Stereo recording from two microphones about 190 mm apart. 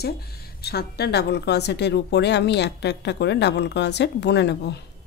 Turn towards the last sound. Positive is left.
turn(degrees=65)  # may be behind; listen again after turning